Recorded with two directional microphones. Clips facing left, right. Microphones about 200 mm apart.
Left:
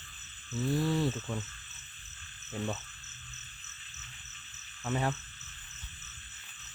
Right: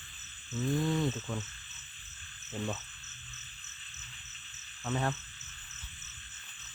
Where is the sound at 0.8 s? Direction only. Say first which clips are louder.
Left 1 dB; 5° left (ahead or behind).